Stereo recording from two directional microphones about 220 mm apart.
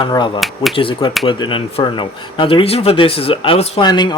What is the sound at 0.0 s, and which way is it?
Speech, 20° left (ahead or behind).